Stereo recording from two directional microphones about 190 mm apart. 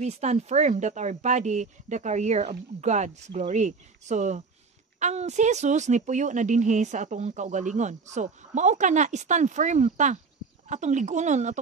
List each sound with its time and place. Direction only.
0.0 s a woman's voice: 35° right (ahead or behind)